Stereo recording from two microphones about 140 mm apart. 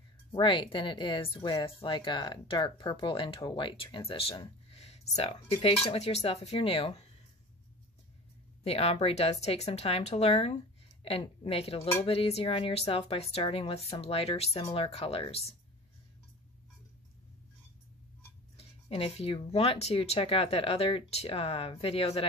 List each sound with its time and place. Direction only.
0.3 s speech: 35° left (ahead or behind)
8.6 s speech: 45° left (ahead or behind)
18.6 s speech: 45° left (ahead or behind)